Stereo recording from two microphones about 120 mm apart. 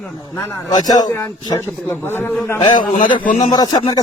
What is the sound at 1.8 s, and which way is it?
Speech, 20° left (ahead or behind).